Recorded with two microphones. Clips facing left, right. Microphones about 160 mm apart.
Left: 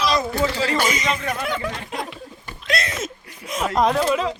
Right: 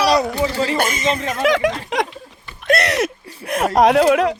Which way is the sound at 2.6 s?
70° right (ahead or behind).